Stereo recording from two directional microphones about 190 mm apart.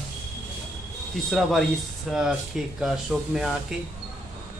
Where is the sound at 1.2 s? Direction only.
Centre (ahead or behind).